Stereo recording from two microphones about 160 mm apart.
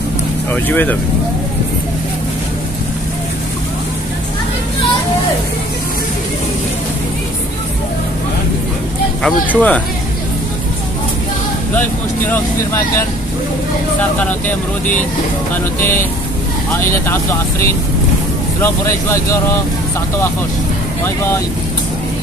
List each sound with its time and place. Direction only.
0.5 s speech: 10° left (ahead or behind)
9.2 s speech: 10° left (ahead or behind)
12.3 s speech: 15° left (ahead or behind)
14.1 s speech: 10° left (ahead or behind)
17.0 s speech: 15° left (ahead or behind)